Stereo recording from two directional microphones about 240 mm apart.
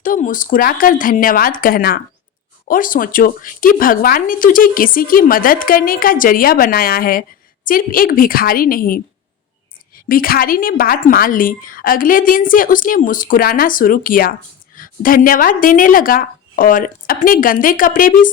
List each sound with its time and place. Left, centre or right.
0.0 s speech: left
10.1 s speech: left